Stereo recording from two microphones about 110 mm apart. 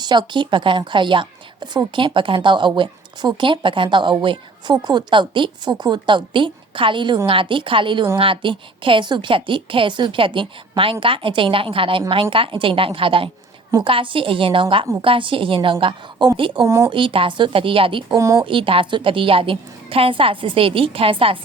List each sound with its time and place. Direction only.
0.0 s a woman's voice: 40° right (ahead or behind)
16.6 s speech: 30° right (ahead or behind)
16.9 s a woman's voice: 50° right (ahead or behind)
18.2 s speech: 30° right (ahead or behind)
18.4 s a woman's voice: 50° right (ahead or behind)